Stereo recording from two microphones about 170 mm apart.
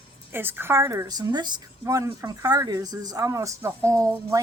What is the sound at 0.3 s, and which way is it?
Speech, 10° right (ahead or behind).